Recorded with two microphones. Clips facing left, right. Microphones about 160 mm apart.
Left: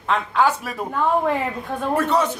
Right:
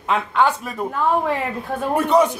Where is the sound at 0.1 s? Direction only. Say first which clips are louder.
Right 1 dB; centre (ahead or behind).